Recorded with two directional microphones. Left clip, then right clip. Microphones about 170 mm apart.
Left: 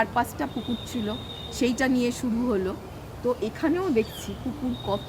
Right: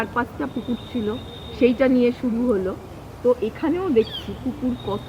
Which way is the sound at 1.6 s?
45° left (ahead or behind).